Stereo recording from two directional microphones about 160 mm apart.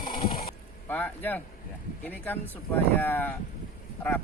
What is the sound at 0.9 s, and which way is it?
A man's voice, 10° left (ahead or behind).